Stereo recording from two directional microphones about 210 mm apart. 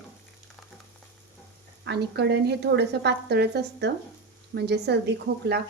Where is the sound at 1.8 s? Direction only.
50° right (ahead or behind).